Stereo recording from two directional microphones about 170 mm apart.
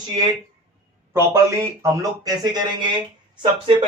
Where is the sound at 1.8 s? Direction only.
20° right (ahead or behind).